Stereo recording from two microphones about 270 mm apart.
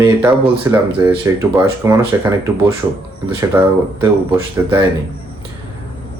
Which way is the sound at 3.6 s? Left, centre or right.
Centre.